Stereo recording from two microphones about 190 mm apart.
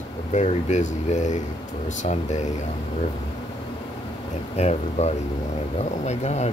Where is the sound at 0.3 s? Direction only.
40° left (ahead or behind).